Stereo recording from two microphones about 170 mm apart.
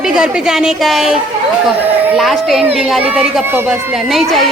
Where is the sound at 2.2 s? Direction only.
Centre (ahead or behind).